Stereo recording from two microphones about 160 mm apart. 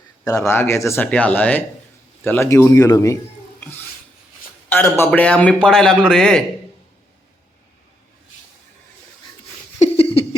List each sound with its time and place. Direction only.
0.3 s a man's voice: 20° left (ahead or behind)
4.7 s a man's voice: 10° left (ahead or behind)
9.7 s a sound: 40° left (ahead or behind)